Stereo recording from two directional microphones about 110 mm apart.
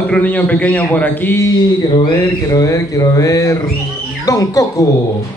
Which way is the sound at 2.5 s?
30° left (ahead or behind).